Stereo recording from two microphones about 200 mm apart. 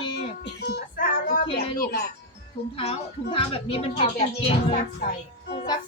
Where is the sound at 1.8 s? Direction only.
45° left (ahead or behind).